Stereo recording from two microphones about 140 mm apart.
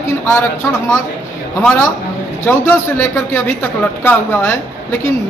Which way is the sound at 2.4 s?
15° left (ahead or behind).